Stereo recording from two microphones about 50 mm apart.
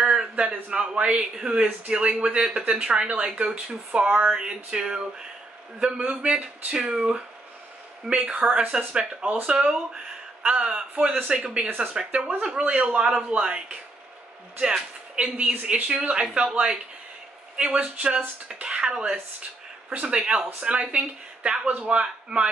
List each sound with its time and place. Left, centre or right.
0.0 s a man's voice: centre